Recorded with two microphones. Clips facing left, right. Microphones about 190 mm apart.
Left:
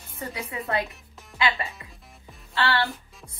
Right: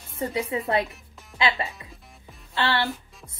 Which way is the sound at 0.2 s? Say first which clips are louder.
Right 7 dB; 25° right (ahead or behind).